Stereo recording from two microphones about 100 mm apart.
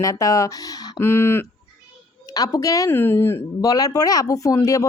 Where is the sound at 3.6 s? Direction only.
35° left (ahead or behind).